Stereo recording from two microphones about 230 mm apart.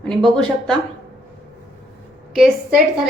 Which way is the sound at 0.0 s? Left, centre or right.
Centre.